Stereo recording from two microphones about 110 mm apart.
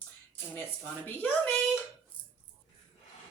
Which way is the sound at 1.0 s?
15° left (ahead or behind).